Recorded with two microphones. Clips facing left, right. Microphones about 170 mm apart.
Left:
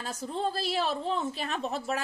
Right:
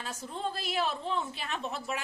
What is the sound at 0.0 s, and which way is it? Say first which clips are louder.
A woman's voice: left 4 dB; 35° left (ahead or behind).